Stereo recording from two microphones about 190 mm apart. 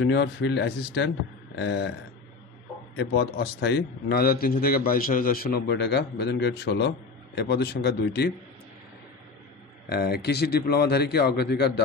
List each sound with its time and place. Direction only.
0.0 s a man's voice: 65° left (ahead or behind)
3.0 s a man's voice: 60° left (ahead or behind)
9.8 s a man's voice: 55° left (ahead or behind)